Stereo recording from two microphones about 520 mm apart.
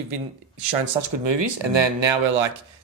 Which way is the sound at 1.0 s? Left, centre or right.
Right.